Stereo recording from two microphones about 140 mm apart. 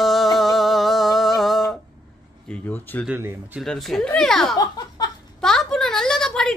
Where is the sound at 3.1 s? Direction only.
15° right (ahead or behind).